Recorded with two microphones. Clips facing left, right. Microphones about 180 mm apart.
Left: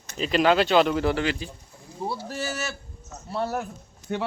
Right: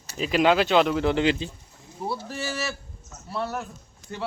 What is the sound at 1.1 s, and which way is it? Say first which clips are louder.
Speech: right 3 dB; 20° right (ahead or behind).